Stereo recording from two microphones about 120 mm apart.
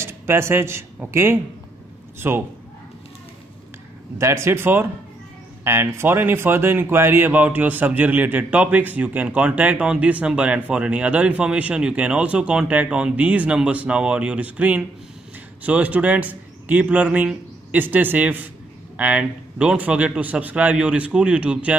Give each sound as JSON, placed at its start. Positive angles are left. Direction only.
{"t": 0.0, "sound": "a man's voice", "side_deg": -20}
{"t": 4.2, "sound": "speech", "side_deg": -20}